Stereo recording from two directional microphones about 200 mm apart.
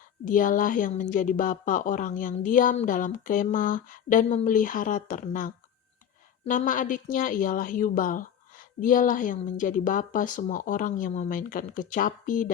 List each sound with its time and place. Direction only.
0.3 s a woman's voice: 40° left (ahead or behind)